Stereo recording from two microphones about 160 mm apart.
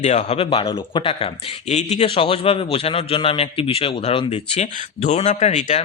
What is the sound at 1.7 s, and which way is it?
A man's voice, 45° left (ahead or behind).